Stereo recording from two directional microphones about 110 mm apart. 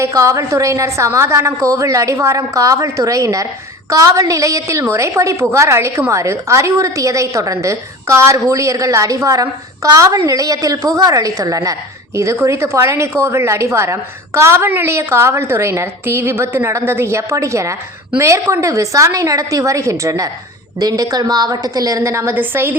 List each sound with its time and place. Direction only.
0.0 s a woman's voice: 30° right (ahead or behind)